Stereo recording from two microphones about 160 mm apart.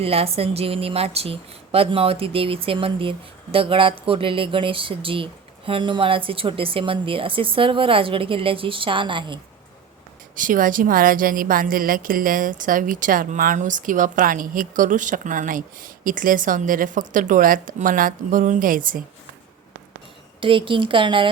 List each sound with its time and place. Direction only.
0.0 s speech: 40° right (ahead or behind)
10.3 s a woman's voice: 55° right (ahead or behind)
20.4 s speech: 30° right (ahead or behind)